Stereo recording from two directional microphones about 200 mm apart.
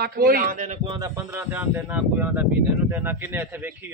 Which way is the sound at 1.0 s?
10° right (ahead or behind).